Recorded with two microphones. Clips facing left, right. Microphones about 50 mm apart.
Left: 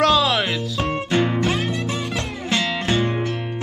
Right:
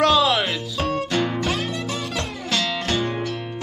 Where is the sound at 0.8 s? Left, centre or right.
Left.